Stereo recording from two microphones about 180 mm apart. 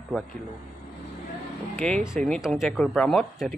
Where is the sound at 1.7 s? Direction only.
5° left (ahead or behind).